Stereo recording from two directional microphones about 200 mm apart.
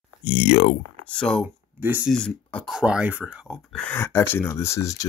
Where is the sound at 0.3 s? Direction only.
35° left (ahead or behind).